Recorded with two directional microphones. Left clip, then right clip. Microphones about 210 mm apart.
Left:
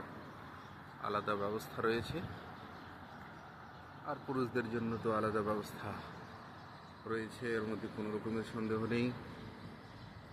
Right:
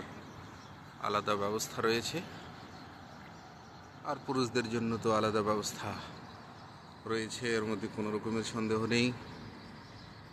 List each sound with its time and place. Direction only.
1.0 s speech: 10° right (ahead or behind)
4.0 s speech: 10° right (ahead or behind)
7.1 s speech: 15° right (ahead or behind)